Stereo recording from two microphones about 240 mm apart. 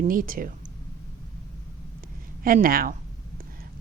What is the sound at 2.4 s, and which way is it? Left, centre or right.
Speech, right.